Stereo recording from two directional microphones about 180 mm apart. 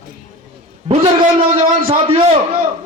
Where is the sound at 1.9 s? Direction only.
35° right (ahead or behind).